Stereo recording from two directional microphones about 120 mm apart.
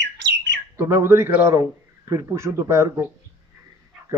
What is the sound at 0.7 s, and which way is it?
A man's voice, 25° right (ahead or behind).